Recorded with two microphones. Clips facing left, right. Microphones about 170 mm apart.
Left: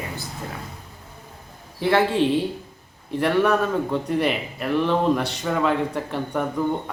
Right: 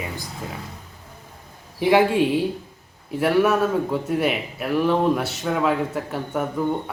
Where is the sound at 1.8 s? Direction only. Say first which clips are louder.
Right 2 dB; 15° right (ahead or behind).